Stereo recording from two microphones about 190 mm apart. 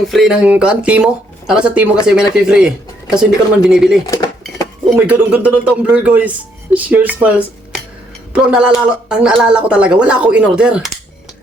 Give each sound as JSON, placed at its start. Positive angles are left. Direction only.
{"t": 0.1, "sound": "speech", "side_deg": 0}
{"t": 4.0, "sound": "speech", "side_deg": 20}
{"t": 4.9, "sound": "a man's voice", "side_deg": -10}